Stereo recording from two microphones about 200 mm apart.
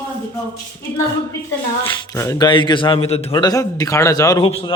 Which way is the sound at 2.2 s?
20° left (ahead or behind).